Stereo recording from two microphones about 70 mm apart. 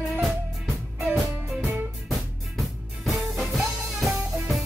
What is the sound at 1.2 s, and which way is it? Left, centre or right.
Music, right.